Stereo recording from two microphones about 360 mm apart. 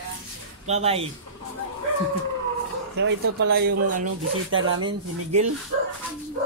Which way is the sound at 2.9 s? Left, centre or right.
Right.